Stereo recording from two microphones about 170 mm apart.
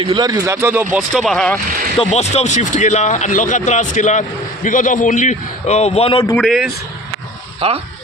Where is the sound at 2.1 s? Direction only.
40° left (ahead or behind).